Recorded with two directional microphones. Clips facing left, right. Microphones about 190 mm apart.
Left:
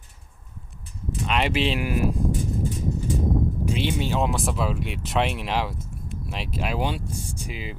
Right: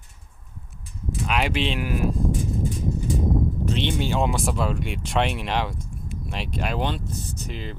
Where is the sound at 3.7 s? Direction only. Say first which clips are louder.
Even; 5° left (ahead or behind).